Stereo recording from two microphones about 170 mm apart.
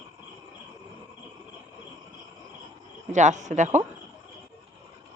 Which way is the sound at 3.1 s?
45° right (ahead or behind).